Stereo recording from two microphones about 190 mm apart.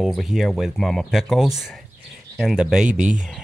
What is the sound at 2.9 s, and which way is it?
Speech, 40° right (ahead or behind).